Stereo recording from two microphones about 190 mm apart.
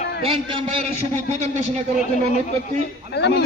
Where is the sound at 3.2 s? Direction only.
60° left (ahead or behind).